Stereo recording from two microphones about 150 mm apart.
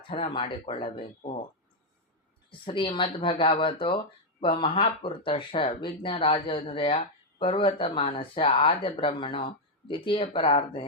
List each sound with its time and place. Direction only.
0.1 s speech: 35° left (ahead or behind)
2.5 s speech: 35° left (ahead or behind)